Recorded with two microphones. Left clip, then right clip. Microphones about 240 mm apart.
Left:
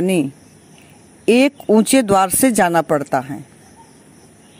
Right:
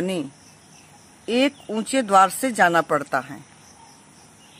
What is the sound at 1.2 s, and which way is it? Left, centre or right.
Speech, left.